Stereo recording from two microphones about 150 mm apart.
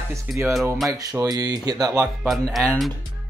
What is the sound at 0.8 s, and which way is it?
Speech, 25° right (ahead or behind).